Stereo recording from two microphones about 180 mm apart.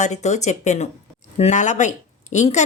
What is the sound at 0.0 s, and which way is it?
Speech, 40° left (ahead or behind).